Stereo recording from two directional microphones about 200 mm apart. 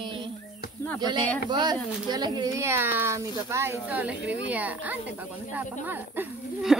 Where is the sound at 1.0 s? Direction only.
20° right (ahead or behind).